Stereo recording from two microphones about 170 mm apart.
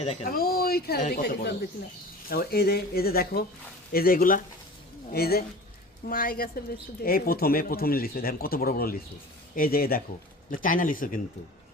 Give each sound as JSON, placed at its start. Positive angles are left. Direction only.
{"t": 0.0, "sound": "speech", "side_deg": 40}
{"t": 0.3, "sound": "a woman's voice", "side_deg": 60}